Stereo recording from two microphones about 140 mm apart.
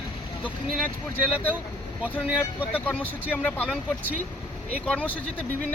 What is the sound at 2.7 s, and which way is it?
Speech, 10° left (ahead or behind).